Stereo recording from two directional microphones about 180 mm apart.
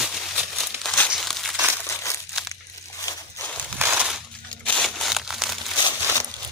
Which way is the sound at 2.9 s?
15° left (ahead or behind).